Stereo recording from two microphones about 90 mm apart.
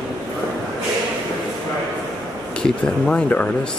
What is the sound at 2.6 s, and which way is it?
Speech, 15° left (ahead or behind).